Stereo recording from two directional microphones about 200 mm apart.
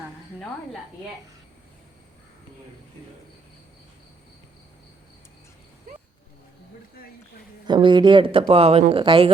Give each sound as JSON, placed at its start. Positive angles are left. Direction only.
{"t": 7.7, "sound": "speech", "side_deg": -25}